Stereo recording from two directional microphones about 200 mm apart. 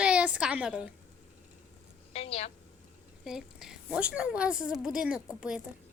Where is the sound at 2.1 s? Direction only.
30° left (ahead or behind).